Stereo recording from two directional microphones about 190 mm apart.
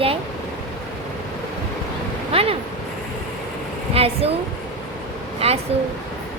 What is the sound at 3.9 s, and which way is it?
Speech, 30° right (ahead or behind).